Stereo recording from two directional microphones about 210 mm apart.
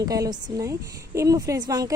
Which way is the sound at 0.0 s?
15° right (ahead or behind).